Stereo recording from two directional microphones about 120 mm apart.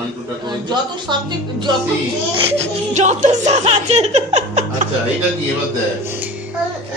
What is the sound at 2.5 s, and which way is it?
Music, 75° right (ahead or behind).